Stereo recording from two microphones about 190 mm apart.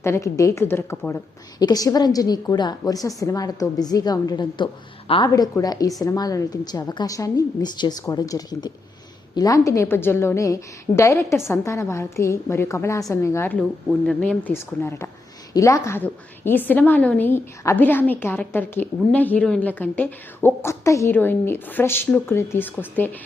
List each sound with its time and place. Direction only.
0.0 s a woman's voice: 15° left (ahead or behind)